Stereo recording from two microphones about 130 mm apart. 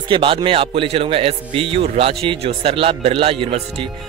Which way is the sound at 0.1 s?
40° right (ahead or behind).